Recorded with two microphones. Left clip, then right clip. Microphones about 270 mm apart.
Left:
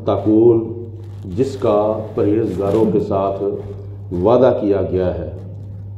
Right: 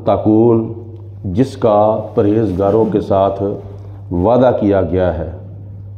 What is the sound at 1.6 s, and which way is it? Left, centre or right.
Speech, right.